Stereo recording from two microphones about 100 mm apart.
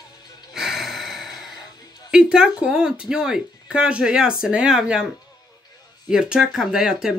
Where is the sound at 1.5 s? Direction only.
40° left (ahead or behind).